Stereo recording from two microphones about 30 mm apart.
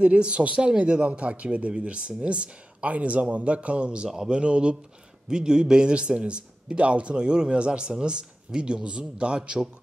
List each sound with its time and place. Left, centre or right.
0.0 s a man's voice: right
5.3 s a man's voice: right